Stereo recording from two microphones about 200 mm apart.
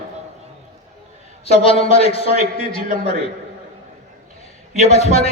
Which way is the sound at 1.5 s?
30° left (ahead or behind).